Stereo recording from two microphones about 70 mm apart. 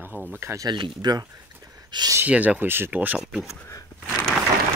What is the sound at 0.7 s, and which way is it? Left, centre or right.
Speech, right.